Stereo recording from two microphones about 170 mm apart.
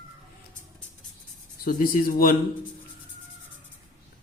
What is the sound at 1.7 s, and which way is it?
Speech, 55° left (ahead or behind).